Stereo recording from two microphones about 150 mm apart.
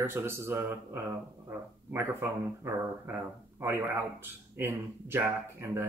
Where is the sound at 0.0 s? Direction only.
15° right (ahead or behind).